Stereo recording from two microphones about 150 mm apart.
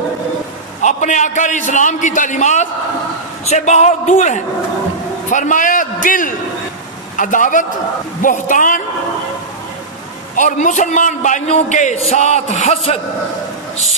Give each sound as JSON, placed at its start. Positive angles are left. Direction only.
{"t": 0.8, "sound": "a man's voice", "side_deg": 55}
{"t": 10.3, "sound": "a man's voice", "side_deg": 55}